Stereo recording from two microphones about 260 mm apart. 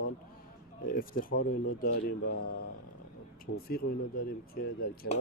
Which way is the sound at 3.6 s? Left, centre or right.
Left.